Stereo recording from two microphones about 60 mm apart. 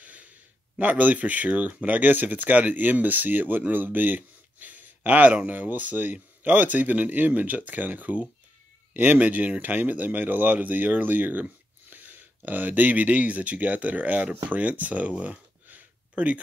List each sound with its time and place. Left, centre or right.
0.0 s gasp: right
0.7 s speech: right